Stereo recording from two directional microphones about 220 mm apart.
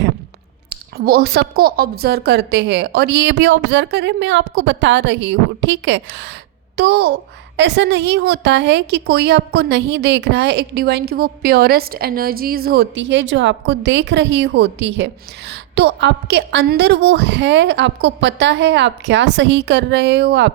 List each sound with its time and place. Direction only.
0.7 s a woman's voice: 45° right (ahead or behind)